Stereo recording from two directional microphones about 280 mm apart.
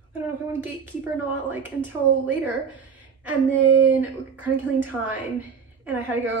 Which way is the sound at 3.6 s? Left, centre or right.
Right.